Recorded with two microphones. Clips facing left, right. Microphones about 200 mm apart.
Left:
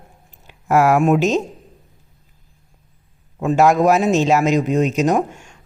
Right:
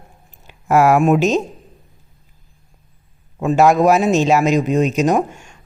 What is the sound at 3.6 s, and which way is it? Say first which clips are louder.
A woman's voice: right 1 dB; 15° right (ahead or behind).